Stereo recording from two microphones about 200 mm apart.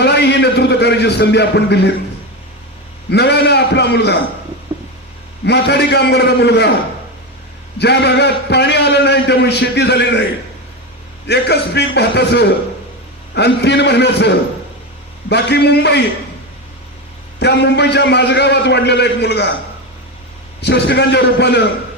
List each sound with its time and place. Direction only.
0.0 s a sound: 55° left (ahead or behind)
3.1 s a man's voice: 55° left (ahead or behind)
5.5 s a man's voice: 55° left (ahead or behind)
7.8 s a man's voice: 60° left (ahead or behind)
11.3 s a man's voice: 55° left (ahead or behind)
17.4 s a man's voice: 55° left (ahead or behind)
20.6 s a man's voice: 60° left (ahead or behind)